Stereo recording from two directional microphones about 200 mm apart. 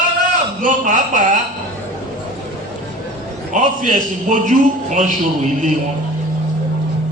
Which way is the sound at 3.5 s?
40° right (ahead or behind).